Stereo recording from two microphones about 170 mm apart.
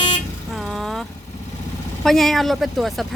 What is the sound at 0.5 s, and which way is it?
Vehicle, centre (ahead or behind).